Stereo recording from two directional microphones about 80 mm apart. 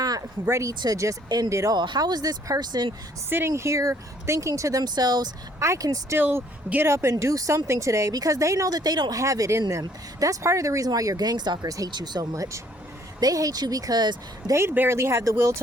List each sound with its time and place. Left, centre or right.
0.0 s speech: right
1.7 s speech: right
3.2 s speech: right
4.8 s speech: right
5.5 s speech: right
6.1 s speech: right
6.8 s speech: right
12.3 s speech: right
14.5 s speech: right